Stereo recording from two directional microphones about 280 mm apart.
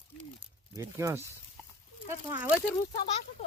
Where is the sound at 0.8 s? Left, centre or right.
Centre.